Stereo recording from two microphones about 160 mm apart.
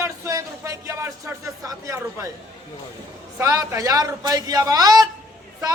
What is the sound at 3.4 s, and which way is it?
A man's voice, 20° right (ahead or behind).